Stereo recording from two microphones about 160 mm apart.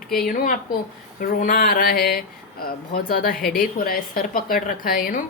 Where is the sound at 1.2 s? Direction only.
60° left (ahead or behind).